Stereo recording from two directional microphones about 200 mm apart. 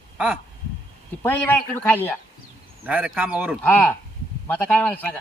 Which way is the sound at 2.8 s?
5° right (ahead or behind).